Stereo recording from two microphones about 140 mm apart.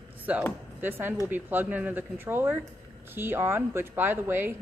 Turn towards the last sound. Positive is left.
turn(degrees=-15)  # may be behind; listen again after turning